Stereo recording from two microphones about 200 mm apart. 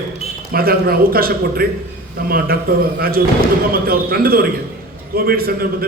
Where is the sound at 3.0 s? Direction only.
50° right (ahead or behind).